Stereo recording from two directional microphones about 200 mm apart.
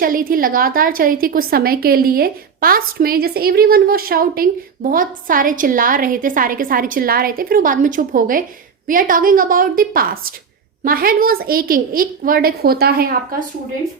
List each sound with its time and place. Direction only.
0.0 s a woman's voice: 45° right (ahead or behind)